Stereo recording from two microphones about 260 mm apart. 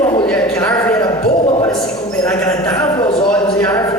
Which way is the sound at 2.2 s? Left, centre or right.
Centre.